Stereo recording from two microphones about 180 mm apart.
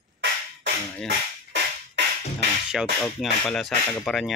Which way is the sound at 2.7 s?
Centre (ahead or behind).